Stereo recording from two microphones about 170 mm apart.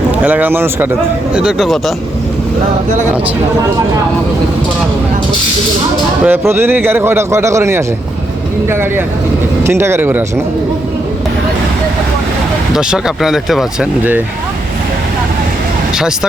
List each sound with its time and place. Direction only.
0.2 s a man's voice: 10° right (ahead or behind)
6.2 s a man's voice: 15° right (ahead or behind)
12.7 s speech: 5° right (ahead or behind)